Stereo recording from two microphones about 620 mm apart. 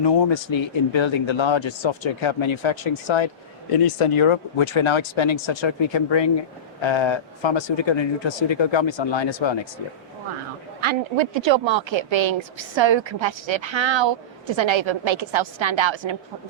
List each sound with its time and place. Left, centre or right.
0.0 s speech: left
10.8 s speech: right